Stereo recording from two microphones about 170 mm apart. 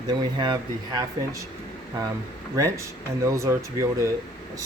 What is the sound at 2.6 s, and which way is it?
Speech, 20° right (ahead or behind).